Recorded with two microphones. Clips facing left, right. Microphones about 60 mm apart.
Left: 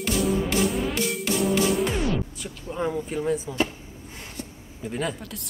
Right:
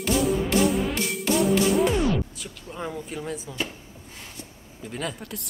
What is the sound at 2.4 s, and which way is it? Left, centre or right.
A man's voice, centre.